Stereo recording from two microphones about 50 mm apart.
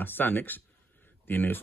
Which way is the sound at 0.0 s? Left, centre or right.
Left.